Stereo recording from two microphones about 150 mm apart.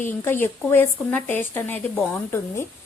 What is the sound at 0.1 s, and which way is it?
Speech, 15° left (ahead or behind).